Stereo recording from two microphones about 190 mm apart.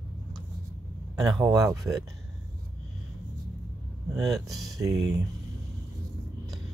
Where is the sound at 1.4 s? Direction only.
15° right (ahead or behind).